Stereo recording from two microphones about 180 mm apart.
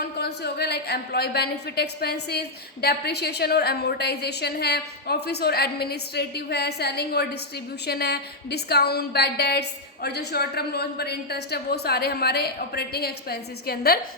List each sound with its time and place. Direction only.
0.2 s a woman's voice: 65° left (ahead or behind)